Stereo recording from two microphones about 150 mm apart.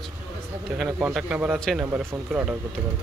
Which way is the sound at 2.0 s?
15° right (ahead or behind).